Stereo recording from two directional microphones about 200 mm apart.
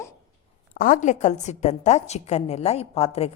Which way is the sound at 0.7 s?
45° left (ahead or behind).